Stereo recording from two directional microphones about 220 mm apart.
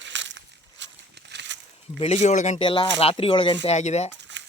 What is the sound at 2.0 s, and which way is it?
Speech, 30° left (ahead or behind).